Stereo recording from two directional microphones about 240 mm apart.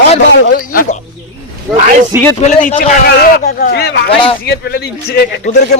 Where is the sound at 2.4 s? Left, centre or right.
Left.